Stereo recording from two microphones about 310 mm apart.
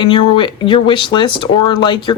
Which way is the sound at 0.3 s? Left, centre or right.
Centre.